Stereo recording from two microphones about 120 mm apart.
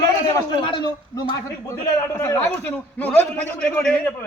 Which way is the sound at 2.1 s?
20° left (ahead or behind).